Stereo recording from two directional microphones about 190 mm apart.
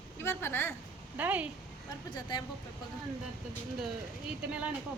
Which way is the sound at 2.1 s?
20° left (ahead or behind).